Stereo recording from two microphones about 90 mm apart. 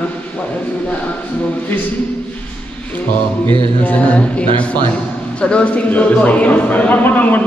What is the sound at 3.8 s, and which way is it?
A man's voice, 15° left (ahead or behind).